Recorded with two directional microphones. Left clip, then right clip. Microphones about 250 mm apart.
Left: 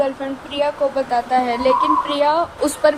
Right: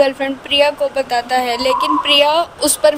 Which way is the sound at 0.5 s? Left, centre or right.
Right.